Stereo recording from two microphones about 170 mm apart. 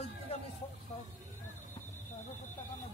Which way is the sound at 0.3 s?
35° left (ahead or behind).